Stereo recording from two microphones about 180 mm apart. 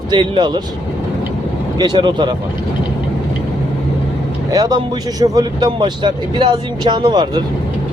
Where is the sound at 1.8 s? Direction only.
25° right (ahead or behind).